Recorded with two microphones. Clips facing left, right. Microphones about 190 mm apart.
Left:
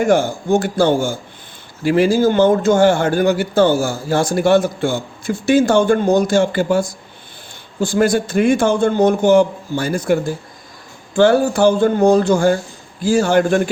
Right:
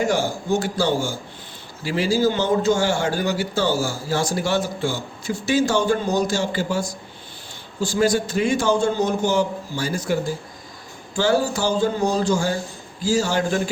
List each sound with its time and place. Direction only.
0.0 s a man's voice: 55° left (ahead or behind)